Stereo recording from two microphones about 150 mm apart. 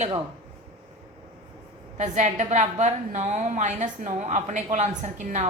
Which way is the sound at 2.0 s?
55° right (ahead or behind).